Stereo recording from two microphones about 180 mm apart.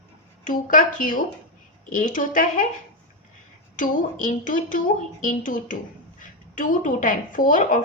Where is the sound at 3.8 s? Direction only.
45° left (ahead or behind).